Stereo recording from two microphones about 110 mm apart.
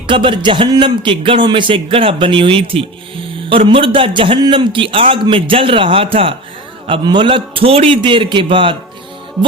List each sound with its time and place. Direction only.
0.1 s a man's voice: 50° right (ahead or behind)